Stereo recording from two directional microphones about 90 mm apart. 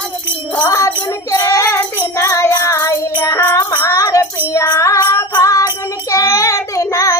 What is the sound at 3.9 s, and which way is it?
Music, 40° left (ahead or behind).